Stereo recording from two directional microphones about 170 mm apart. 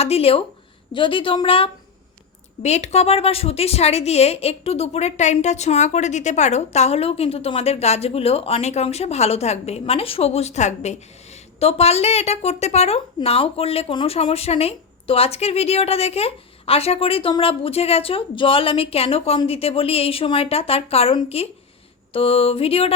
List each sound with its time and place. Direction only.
0.0 s a woman's voice: 35° left (ahead or behind)